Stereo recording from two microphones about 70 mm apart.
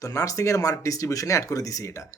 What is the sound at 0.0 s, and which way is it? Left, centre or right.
Speech, left.